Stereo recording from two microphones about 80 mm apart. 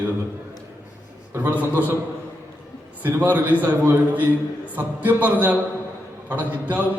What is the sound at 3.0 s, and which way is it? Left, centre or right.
A man's voice, right.